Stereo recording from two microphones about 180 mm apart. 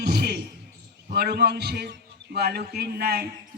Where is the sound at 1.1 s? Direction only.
65° right (ahead or behind).